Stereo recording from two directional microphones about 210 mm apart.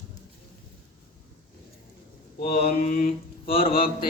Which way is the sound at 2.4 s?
40° left (ahead or behind).